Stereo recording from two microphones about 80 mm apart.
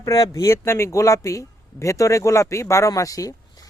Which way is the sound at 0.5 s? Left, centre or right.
Left.